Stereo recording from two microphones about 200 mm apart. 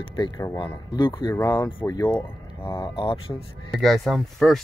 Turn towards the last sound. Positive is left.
turn(degrees=0)  # may be behind; listen again after turning